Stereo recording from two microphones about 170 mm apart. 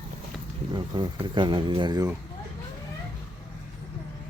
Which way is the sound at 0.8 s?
25° right (ahead or behind).